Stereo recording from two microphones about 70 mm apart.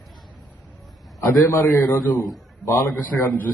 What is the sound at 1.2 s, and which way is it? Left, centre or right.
Speech, left.